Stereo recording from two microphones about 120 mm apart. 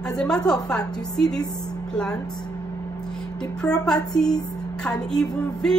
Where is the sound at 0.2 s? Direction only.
5° left (ahead or behind).